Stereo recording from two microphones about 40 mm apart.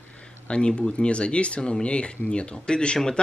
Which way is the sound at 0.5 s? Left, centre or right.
Left.